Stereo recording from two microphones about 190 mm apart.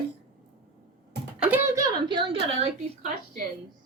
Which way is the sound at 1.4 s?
10° right (ahead or behind).